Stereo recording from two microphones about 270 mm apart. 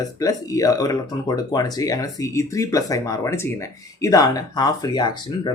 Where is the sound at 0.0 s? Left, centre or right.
Centre.